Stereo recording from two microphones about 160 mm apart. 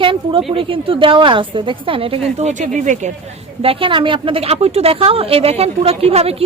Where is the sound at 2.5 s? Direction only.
50° right (ahead or behind).